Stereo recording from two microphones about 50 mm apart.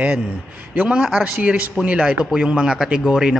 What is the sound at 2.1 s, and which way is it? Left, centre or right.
A man's voice, centre.